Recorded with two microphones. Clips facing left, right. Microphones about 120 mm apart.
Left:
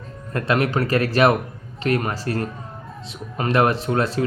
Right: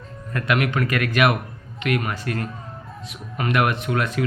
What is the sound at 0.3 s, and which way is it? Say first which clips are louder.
Speech: left 2 dB; 30° left (ahead or behind).